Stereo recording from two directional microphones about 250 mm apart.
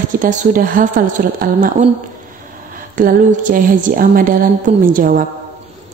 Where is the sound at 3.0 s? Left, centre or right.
Right.